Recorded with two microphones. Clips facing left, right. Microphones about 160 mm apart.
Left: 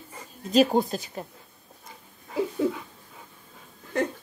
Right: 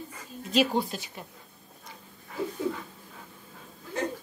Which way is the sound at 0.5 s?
40° left (ahead or behind).